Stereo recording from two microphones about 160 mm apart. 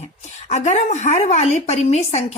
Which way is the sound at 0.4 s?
45° left (ahead or behind).